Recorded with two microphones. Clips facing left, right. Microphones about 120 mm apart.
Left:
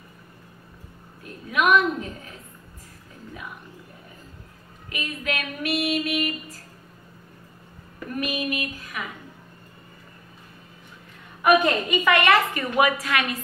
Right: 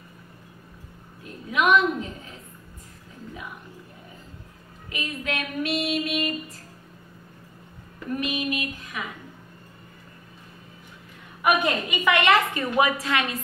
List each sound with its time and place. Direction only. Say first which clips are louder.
1.5 s a woman's voice: even; 20° right (ahead or behind)
4.8 s female singing: left 1 dB; 25° right (ahead or behind)
8.2 s a sound: left 2 dB; 25° right (ahead or behind)
11.6 s a woman's voice: left 2 dB; 15° right (ahead or behind)